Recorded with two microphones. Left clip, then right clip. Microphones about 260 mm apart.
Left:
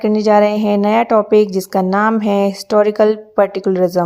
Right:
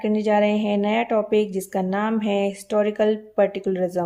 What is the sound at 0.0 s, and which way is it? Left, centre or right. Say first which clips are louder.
Speech: left 8 dB; left.